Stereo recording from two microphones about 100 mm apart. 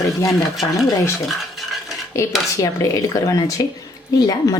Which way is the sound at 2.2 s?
30° left (ahead or behind).